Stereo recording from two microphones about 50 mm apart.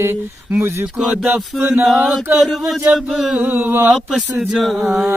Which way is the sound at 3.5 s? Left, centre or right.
Right.